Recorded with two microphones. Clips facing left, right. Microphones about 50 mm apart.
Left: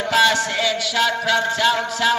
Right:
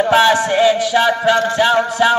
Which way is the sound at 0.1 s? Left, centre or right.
Centre.